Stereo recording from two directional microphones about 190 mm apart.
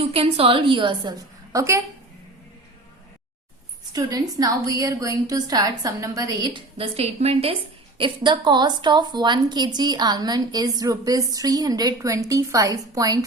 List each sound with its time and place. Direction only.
0.0 s a woman's voice: 30° right (ahead or behind)
3.9 s a woman's voice: 20° right (ahead or behind)